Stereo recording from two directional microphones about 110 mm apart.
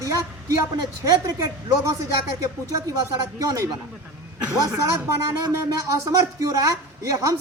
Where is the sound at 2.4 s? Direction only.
30° right (ahead or behind).